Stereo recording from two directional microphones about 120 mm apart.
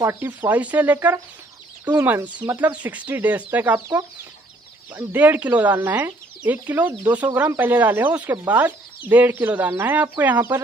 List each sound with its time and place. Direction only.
0.0 s speech: 20° right (ahead or behind)